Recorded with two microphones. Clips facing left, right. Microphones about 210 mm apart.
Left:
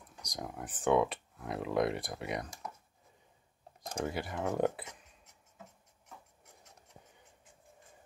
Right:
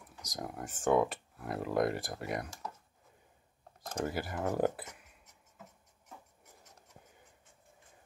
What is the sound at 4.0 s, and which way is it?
Speech, 5° right (ahead or behind).